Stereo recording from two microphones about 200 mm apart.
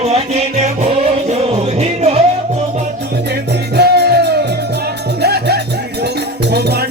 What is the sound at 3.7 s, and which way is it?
Music, 55° right (ahead or behind).